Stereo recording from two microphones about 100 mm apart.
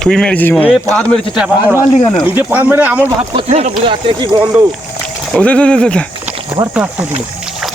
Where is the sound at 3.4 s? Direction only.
60° right (ahead or behind).